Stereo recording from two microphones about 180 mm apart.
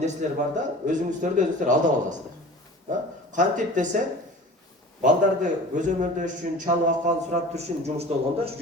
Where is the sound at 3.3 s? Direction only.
45° right (ahead or behind).